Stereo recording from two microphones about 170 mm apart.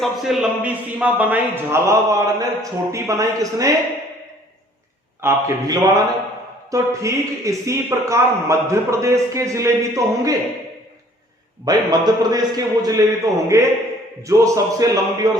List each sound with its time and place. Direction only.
0.0 s a man's voice: centre (ahead or behind); by 3.7 s 20° right (ahead or behind)
5.2 s a man's voice: 15° right (ahead or behind)
11.6 s a man's voice: 25° right (ahead or behind)